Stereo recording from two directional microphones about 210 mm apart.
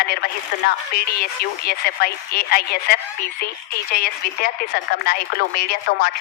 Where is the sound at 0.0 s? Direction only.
45° left (ahead or behind).